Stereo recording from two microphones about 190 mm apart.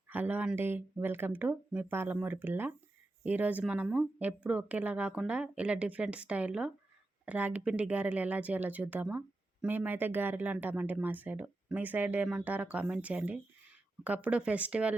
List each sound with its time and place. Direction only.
0.1 s speech: 10° right (ahead or behind)